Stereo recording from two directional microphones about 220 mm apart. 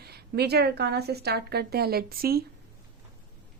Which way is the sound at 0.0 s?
45° right (ahead or behind).